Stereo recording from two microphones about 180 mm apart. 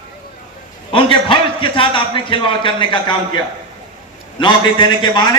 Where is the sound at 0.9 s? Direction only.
30° left (ahead or behind).